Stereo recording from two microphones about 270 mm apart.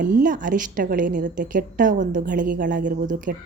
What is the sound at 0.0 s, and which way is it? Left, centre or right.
A woman's voice, right.